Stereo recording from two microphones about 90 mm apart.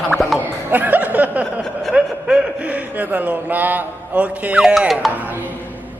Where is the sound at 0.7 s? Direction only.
20° right (ahead or behind).